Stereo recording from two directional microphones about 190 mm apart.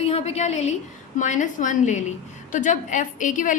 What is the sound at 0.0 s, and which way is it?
A woman's voice, 35° left (ahead or behind).